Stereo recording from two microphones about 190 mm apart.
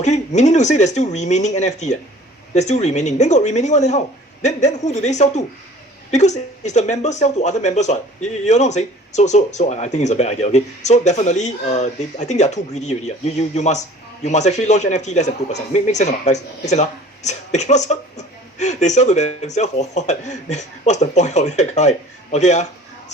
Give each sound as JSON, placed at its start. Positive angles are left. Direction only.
{"t": 0.0, "sound": "speech", "side_deg": 40}